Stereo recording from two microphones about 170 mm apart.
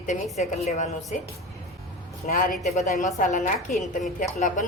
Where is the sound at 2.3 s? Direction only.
55° left (ahead or behind).